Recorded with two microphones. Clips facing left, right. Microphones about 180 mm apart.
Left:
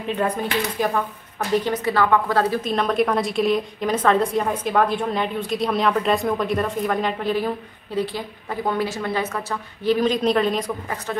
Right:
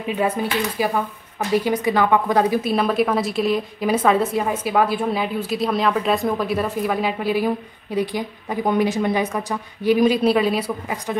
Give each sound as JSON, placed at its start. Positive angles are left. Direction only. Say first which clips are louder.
{"t": 0.1, "sound": "a woman's voice", "louder": "right 1 dB", "side_deg": -5}